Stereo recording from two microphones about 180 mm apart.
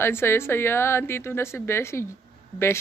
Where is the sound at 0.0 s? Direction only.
15° left (ahead or behind).